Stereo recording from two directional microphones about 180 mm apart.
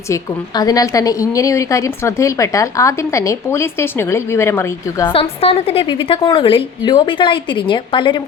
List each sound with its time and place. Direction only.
0.1 s a woman's voice: 20° left (ahead or behind)
5.0 s a woman's voice: 30° left (ahead or behind)